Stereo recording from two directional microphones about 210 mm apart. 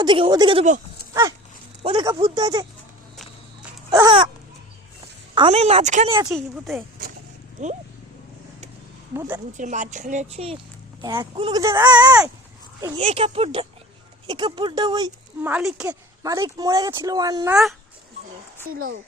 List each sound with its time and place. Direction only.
0.0 s speech: 20° right (ahead or behind)
1.8 s speech: 25° right (ahead or behind)
3.9 s speech: 20° right (ahead or behind)
5.3 s speech: 25° right (ahead or behind)
6.2 s speech: centre (ahead or behind)
9.1 s speech: 10° right (ahead or behind)
9.5 s speech: 35° right (ahead or behind); by 15.1 s 20° right (ahead or behind)
15.4 s speech: 5° right (ahead or behind)
15.9 s speech: 15° right (ahead or behind)